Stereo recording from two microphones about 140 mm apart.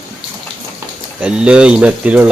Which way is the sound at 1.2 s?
5° right (ahead or behind).